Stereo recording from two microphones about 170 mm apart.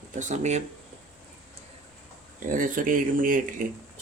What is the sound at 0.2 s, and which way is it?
Speech, 45° right (ahead or behind).